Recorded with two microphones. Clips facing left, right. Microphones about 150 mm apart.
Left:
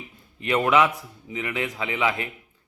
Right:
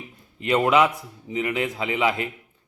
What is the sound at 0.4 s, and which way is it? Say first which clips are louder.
A man's voice: right 1 dB; 25° right (ahead or behind).